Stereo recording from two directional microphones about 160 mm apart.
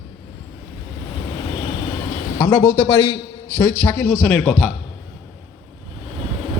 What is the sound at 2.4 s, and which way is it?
A man's voice, 15° left (ahead or behind).